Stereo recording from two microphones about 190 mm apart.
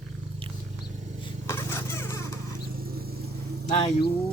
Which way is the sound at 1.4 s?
15° left (ahead or behind).